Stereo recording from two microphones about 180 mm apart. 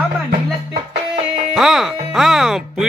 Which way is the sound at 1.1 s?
Centre (ahead or behind).